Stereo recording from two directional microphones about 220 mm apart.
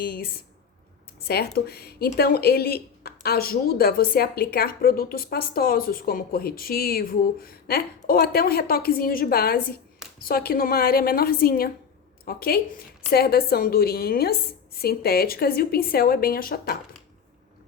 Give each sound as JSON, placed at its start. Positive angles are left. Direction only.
{"t": 0.0, "sound": "a woman's voice", "side_deg": 45}
{"t": 1.3, "sound": "a woman's voice", "side_deg": 45}